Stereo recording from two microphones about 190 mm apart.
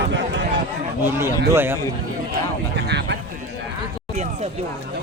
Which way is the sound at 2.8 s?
60° right (ahead or behind).